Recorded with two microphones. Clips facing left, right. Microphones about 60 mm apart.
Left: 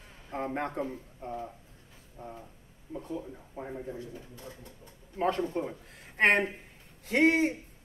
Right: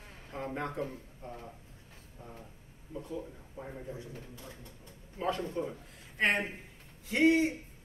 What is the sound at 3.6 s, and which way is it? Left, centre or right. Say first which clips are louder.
Speech: left 4 dB; left.